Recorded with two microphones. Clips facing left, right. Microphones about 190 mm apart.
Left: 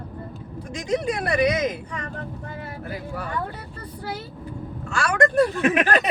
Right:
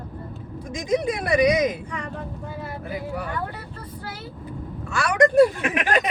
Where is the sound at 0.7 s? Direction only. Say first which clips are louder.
Right 1 dB; 20° right (ahead or behind).